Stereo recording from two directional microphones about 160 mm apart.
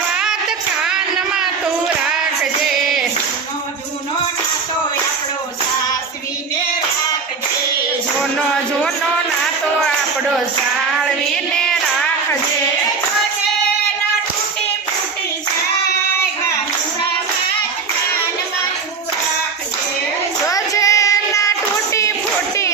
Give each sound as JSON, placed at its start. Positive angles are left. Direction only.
{"t": 0.1, "sound": "music", "side_deg": -5}
{"t": 20.5, "sound": "child singing", "side_deg": 20}